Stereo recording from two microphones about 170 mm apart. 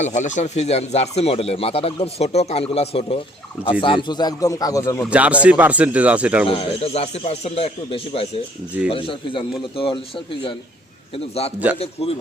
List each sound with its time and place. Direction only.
0.0 s speech: 45° left (ahead or behind); by 5.0 s 15° left (ahead or behind)
5.0 s speech: 5° right (ahead or behind)
6.5 s speech: 35° left (ahead or behind)
11.8 s speech: 35° left (ahead or behind)